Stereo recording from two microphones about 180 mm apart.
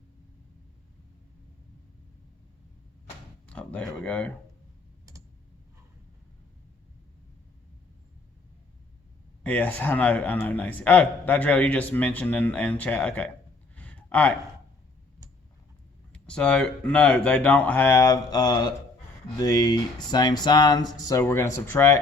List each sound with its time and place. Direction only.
3.4 s speech: 5° left (ahead or behind)
9.4 s a man's voice: 10° left (ahead or behind)
13.7 s a sound: 10° left (ahead or behind)
16.1 s a man's voice: 5° left (ahead or behind)